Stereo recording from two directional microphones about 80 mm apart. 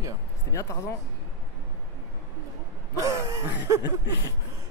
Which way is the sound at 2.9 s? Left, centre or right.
Right.